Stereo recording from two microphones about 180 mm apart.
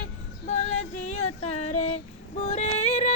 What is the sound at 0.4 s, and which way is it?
Female singing, 40° left (ahead or behind).